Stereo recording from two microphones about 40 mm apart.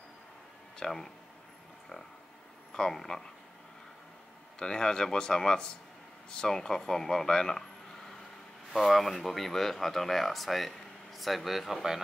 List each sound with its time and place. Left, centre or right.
0.7 s speech: centre
2.7 s speech: centre
4.6 s speech: centre
8.7 s speech: centre